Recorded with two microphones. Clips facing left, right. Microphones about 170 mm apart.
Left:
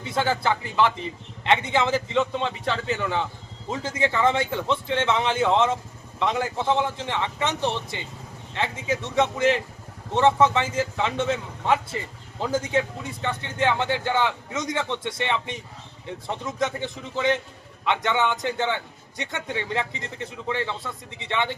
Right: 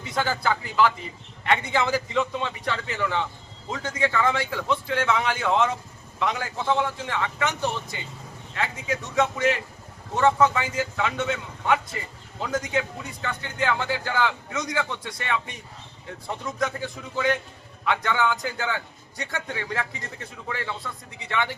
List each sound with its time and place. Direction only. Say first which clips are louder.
0.0 s a man's voice: left 2 dB; 25° left (ahead or behind)